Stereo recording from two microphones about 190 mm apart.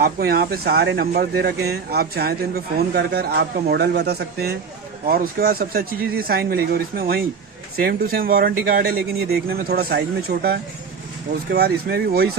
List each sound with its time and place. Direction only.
0.0 s speech: 55° right (ahead or behind)